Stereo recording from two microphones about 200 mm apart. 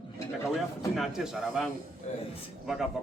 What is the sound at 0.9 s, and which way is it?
Speech, centre (ahead or behind).